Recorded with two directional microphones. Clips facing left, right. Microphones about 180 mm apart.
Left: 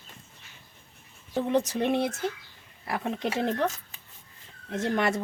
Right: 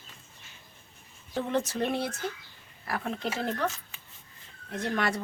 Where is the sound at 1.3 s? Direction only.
5° left (ahead or behind).